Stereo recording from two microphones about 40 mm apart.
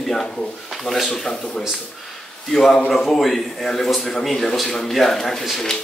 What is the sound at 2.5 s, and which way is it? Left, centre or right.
A man's voice, centre.